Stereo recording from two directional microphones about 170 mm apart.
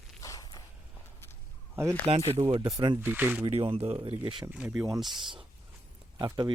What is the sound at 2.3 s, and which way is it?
Speech, 30° right (ahead or behind).